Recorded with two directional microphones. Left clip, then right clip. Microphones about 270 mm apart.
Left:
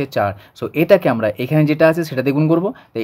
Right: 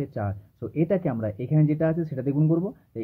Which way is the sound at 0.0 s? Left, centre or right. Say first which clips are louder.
Left 14 dB; left.